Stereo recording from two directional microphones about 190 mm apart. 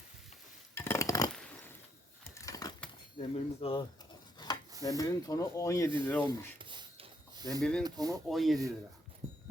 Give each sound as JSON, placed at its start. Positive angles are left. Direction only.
{"t": 0.7, "sound": "dishes", "side_deg": 10}
{"t": 2.3, "sound": "a sound", "side_deg": 15}
{"t": 3.2, "sound": "speech", "side_deg": 30}
{"t": 4.4, "sound": "a sound", "side_deg": 20}
{"t": 4.8, "sound": "speech", "side_deg": 20}
{"t": 6.6, "sound": "a sound", "side_deg": -25}
{"t": 7.6, "sound": "speech", "side_deg": 5}
{"t": 7.9, "sound": "speech", "side_deg": -20}
{"t": 8.3, "sound": "speech", "side_deg": 0}